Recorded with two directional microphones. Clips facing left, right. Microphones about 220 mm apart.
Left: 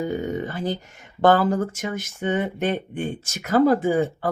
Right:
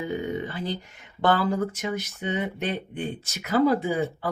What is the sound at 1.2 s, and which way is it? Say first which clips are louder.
Speech: left 5 dB; 45° left (ahead or behind).